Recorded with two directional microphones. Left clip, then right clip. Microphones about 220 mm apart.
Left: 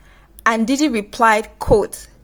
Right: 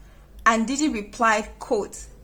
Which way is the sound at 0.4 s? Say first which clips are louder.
Left 4 dB; 35° left (ahead or behind).